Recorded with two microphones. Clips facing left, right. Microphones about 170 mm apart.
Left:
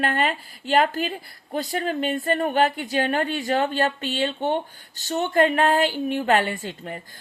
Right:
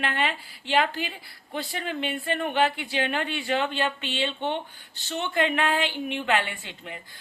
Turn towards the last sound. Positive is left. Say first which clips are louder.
# left 8 dB
turn(degrees=40)  # may be behind; listen again after turning